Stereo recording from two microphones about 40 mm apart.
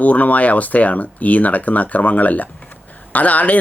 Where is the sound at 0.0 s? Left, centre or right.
Left.